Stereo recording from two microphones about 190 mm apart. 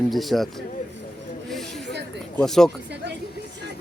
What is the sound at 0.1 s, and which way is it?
Speech, centre (ahead or behind).